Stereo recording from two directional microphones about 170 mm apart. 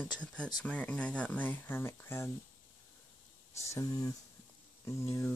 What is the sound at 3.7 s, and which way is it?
Speech, 20° left (ahead or behind).